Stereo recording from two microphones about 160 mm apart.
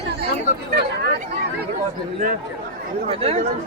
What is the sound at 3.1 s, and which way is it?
Speech, 40° right (ahead or behind).